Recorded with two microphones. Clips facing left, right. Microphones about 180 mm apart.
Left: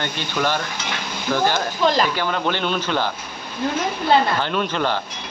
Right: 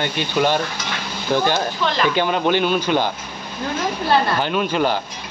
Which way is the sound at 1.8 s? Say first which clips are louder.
Left 5 dB; 40° left (ahead or behind).